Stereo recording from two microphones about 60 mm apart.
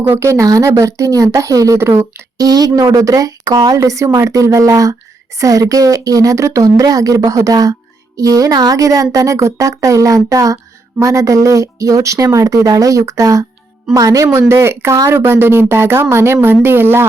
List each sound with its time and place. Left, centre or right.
0.0 s speech: right
0.3 s speech: right
1.8 s speech: right
2.4 s speech: right
14.3 s speech: right